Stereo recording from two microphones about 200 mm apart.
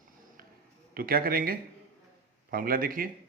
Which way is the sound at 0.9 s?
45° right (ahead or behind).